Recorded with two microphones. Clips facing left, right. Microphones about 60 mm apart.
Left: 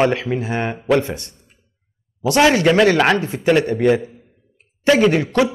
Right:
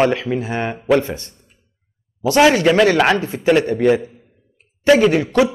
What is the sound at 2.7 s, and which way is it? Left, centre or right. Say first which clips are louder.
A man's voice: even; centre.